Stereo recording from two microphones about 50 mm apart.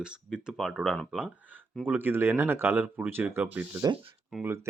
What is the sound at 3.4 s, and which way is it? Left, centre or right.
Speech, right.